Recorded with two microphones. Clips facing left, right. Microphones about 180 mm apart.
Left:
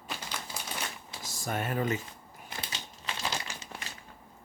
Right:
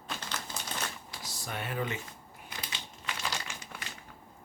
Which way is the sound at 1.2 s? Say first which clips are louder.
Left 6 dB; 45° left (ahead or behind).